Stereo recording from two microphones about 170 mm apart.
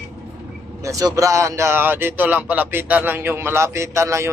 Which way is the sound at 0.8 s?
20° right (ahead or behind).